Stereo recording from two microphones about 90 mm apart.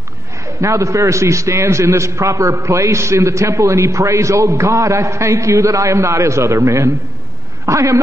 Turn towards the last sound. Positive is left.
turn(degrees=-35)  # may be behind; listen again after turning